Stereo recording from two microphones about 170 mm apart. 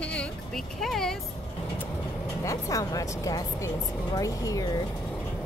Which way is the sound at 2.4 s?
20° left (ahead or behind).